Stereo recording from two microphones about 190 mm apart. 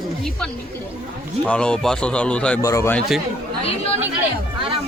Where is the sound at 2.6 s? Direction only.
15° left (ahead or behind).